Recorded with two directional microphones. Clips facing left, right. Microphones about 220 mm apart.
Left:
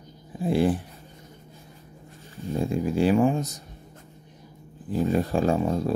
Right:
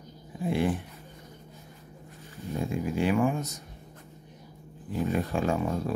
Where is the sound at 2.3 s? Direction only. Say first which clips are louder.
Left 5 dB; 30° left (ahead or behind).